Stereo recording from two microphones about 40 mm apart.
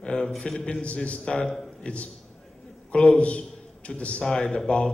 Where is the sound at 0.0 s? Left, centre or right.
Left.